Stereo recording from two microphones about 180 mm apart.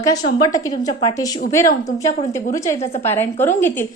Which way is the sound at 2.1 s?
40° left (ahead or behind).